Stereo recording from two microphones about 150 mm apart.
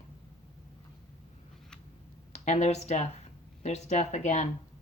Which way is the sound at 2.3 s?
50° left (ahead or behind).